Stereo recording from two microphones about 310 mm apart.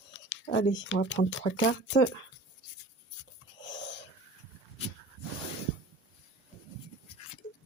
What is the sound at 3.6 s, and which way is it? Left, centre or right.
Wheeze, left.